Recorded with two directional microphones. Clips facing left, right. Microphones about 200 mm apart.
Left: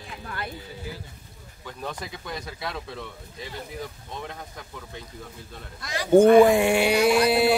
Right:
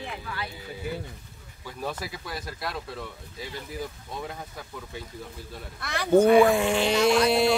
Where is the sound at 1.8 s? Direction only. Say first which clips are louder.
Right 2 dB; 5° right (ahead or behind).